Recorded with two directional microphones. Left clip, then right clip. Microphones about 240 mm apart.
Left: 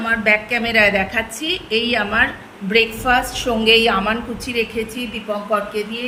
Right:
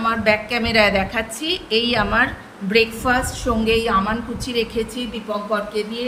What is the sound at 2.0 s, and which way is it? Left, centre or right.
Speech, centre.